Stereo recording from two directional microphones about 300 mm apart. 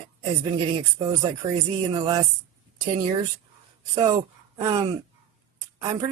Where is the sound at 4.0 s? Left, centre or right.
Centre.